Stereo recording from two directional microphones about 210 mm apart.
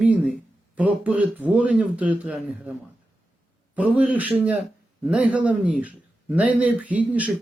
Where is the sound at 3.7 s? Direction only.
5° right (ahead or behind).